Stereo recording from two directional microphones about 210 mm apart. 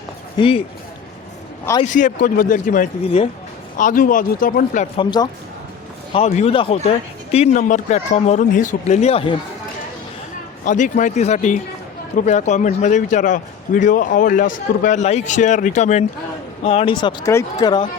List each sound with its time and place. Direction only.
0.3 s speech: 25° left (ahead or behind)
1.8 s speech: 35° left (ahead or behind)
4.9 s speech: 20° left (ahead or behind)
6.1 s speech: 30° left (ahead or behind)
10.6 s speech: 40° left (ahead or behind); by 17.8 s 20° left (ahead or behind)